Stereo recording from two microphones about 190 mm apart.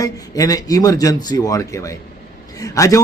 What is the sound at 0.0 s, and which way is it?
A man's voice, 20° left (ahead or behind).